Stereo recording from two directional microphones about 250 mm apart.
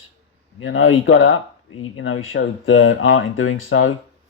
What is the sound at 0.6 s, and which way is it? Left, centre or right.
Speech, left.